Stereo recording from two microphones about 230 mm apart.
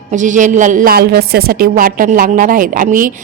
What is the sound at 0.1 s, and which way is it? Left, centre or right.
A woman's voice, right.